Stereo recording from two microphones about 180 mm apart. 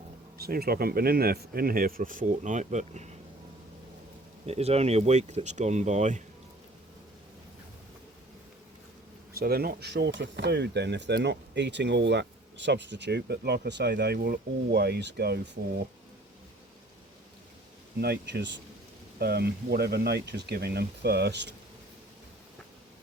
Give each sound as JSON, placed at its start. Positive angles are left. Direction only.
{"t": 0.3, "sound": "speech", "side_deg": -60}
{"t": 4.4, "sound": "speech", "side_deg": -35}
{"t": 9.4, "sound": "speech", "side_deg": -60}
{"t": 18.0, "sound": "speech", "side_deg": -65}